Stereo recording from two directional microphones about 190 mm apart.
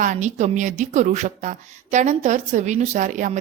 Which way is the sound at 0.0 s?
40° right (ahead or behind).